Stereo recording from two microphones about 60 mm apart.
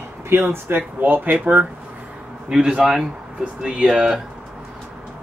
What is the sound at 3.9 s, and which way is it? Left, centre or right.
Speech, centre.